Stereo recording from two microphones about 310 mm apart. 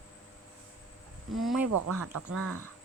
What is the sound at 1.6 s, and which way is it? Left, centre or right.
Speech, right.